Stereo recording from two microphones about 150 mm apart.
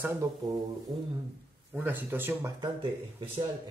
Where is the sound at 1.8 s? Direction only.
15° right (ahead or behind).